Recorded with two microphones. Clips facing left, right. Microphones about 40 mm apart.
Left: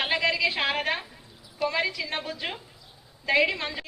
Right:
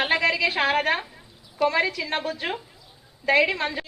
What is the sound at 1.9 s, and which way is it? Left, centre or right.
Speech, centre.